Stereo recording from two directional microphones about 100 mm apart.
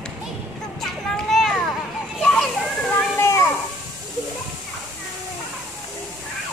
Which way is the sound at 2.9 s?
30° left (ahead or behind).